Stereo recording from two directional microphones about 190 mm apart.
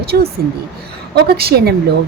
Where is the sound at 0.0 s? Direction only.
55° right (ahead or behind).